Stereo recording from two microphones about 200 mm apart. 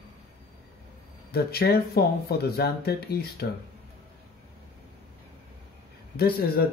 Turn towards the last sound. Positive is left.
turn(degrees=50)  # may be behind; listen again after turning